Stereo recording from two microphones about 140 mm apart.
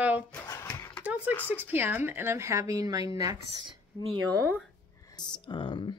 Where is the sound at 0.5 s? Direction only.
20° left (ahead or behind).